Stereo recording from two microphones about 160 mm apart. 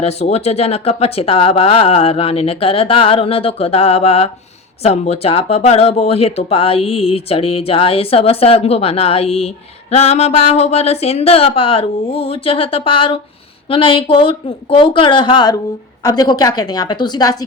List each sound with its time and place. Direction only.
0.0 s a woman's voice: 40° left (ahead or behind); by 17.3 s 25° left (ahead or behind)